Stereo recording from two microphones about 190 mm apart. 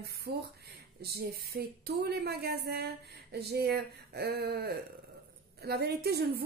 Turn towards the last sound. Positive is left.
turn(degrees=-55)  # may be behind; listen again after turning